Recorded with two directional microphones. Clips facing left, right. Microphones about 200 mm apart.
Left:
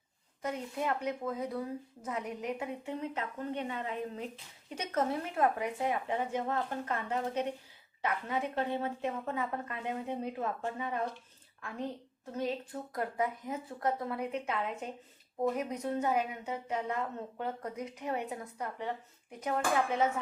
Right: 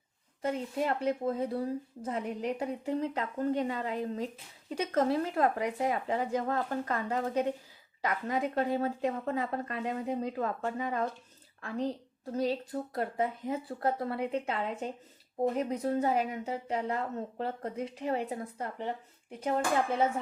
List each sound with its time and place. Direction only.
0.4 s a woman's voice: 30° right (ahead or behind)